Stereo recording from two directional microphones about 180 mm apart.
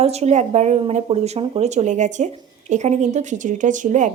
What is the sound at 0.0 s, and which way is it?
Speech, 35° right (ahead or behind).